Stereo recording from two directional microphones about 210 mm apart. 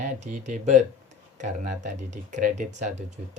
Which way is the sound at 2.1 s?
35° right (ahead or behind).